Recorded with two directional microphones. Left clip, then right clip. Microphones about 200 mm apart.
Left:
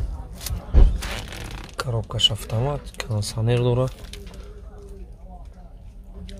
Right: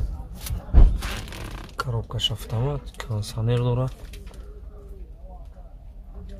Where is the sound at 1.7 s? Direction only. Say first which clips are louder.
Left 2 dB; 15° left (ahead or behind).